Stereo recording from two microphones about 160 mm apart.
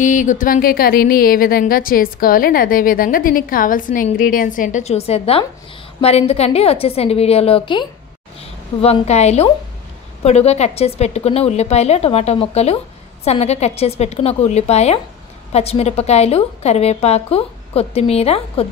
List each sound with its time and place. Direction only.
0.0 s a woman's voice: 55° left (ahead or behind); by 7.8 s 35° left (ahead or behind)
8.8 s a woman's voice: 40° left (ahead or behind)